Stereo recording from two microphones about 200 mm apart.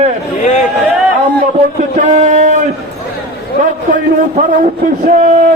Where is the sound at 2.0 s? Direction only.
40° right (ahead or behind).